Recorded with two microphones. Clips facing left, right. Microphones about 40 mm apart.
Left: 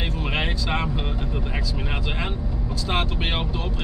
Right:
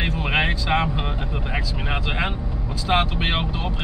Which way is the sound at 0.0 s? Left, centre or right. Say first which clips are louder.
Right 4 dB; right.